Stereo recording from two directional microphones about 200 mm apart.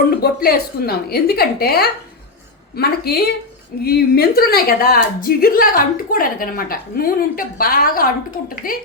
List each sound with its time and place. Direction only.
0.2 s a woman's voice: 50° left (ahead or behind)